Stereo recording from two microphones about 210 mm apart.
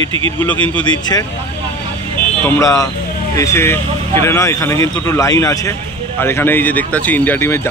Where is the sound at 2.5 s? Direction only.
15° left (ahead or behind).